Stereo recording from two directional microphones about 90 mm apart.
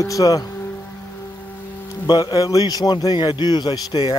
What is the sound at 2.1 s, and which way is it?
Speech, 50° left (ahead or behind).